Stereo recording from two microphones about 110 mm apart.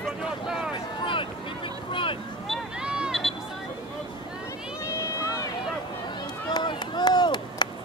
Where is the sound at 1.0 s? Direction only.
50° left (ahead or behind).